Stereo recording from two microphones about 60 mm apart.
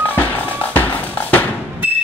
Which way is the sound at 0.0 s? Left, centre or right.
Left.